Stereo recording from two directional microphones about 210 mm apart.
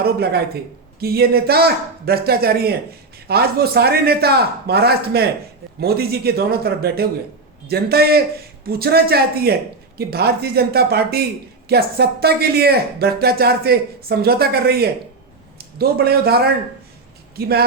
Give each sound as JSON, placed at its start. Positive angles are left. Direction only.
{"t": 0.0, "sound": "a man's voice", "side_deg": -50}